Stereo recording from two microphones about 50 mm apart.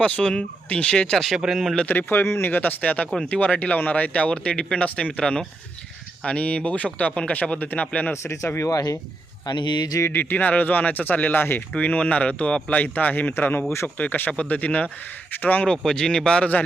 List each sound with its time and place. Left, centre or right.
0.0 s speech: centre
1.1 s speech: centre
1.9 s speech: left
2.5 s speech: left
8.1 s speech: left
10.1 s speech: left
10.3 s speech: left
11.7 s speech: left
15.6 s speech: centre